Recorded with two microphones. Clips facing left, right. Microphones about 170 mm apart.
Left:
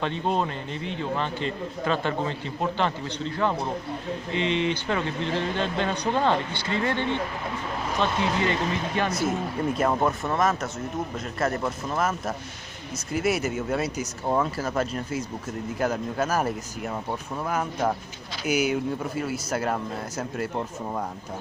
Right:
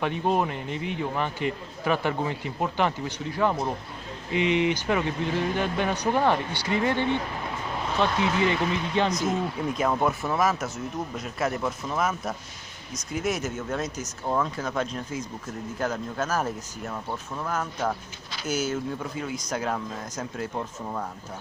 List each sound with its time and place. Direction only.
0.0 s a man's voice: 15° right (ahead or behind)
9.1 s speech: 5° left (ahead or behind)